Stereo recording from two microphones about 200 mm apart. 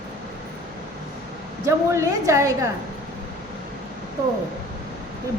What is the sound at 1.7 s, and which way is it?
A woman's voice, 15° right (ahead or behind).